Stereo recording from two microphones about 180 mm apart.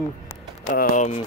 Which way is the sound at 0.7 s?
45° left (ahead or behind).